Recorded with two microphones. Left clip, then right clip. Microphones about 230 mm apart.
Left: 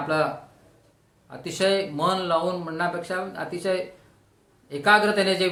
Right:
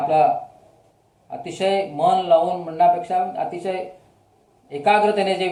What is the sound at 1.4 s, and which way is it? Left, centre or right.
Speech, left.